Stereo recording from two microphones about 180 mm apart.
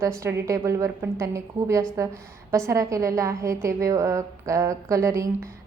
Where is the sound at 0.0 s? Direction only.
15° right (ahead or behind).